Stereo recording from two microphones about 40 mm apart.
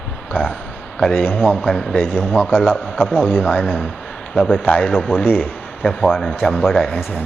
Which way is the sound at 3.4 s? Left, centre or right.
Left.